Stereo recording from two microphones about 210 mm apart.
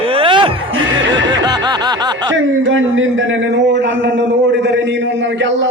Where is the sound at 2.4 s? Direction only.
65° right (ahead or behind).